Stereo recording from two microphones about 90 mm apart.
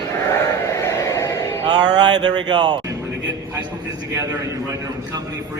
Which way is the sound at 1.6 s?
50° right (ahead or behind).